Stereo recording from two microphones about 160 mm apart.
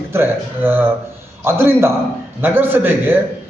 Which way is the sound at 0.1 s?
15° right (ahead or behind).